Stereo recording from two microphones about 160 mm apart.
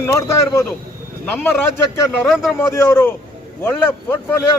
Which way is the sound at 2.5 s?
15° left (ahead or behind).